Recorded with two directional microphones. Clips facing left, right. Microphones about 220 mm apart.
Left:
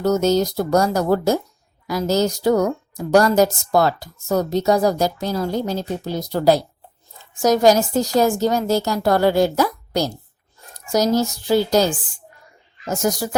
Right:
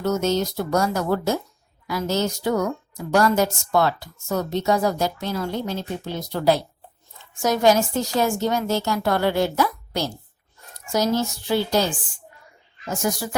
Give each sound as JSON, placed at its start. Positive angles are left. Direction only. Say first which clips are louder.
{"t": 0.0, "sound": "a woman's voice", "louder": "left 5 dB", "side_deg": 35}